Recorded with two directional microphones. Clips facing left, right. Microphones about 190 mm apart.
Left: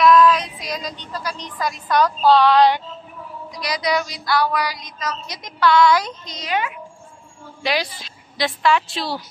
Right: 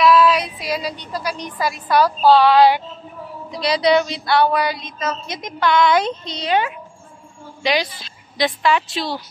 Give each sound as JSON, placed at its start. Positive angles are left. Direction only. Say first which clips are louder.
{"t": 0.0, "sound": "a woman's voice", "louder": "even", "side_deg": -10}
{"t": 3.5, "sound": "speech", "louder": "right 6 dB", "side_deg": -30}
{"t": 7.6, "sound": "a woman's voice", "louder": "right 3 dB", "side_deg": 5}